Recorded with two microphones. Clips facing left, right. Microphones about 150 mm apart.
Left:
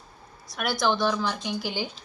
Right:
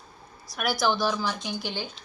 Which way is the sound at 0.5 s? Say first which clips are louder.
Even; centre (ahead or behind).